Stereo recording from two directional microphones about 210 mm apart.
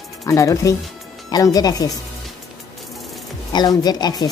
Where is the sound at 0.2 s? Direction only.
15° left (ahead or behind).